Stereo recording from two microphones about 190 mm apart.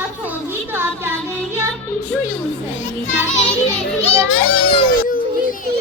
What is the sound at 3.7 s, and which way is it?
Speech, 35° left (ahead or behind).